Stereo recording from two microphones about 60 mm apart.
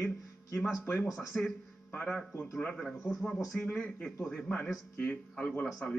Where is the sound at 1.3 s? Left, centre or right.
Centre.